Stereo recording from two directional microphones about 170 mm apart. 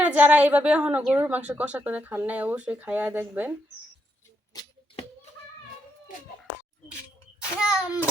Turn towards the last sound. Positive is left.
turn(degrees=-5)  # may be behind; listen again after turning